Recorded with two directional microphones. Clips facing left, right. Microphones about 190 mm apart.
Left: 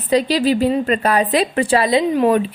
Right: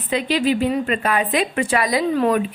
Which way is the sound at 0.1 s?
35° left (ahead or behind).